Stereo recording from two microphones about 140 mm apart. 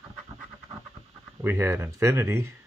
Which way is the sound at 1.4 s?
15° right (ahead or behind).